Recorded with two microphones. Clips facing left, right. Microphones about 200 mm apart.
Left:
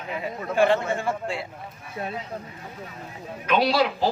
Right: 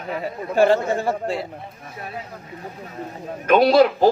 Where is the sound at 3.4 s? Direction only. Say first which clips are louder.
Right 8 dB; 45° right (ahead or behind).